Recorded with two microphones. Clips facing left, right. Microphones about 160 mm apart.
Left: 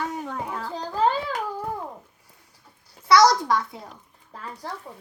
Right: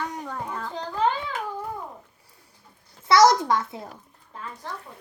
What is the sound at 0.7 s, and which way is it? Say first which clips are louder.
Speech: left 2 dB; 35° left (ahead or behind).